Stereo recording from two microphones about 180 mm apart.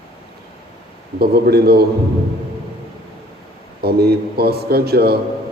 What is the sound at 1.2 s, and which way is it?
Speech, 60° right (ahead or behind).